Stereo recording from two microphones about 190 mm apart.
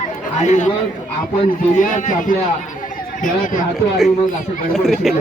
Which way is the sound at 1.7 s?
40° left (ahead or behind).